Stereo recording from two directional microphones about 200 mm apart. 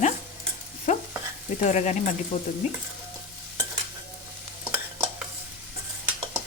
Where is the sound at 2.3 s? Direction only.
30° left (ahead or behind).